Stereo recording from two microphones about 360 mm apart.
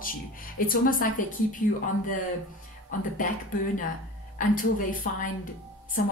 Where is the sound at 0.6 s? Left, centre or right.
Left.